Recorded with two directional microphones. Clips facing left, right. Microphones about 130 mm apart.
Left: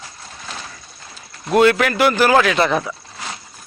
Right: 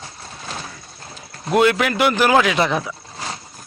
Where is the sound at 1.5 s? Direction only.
15° right (ahead or behind).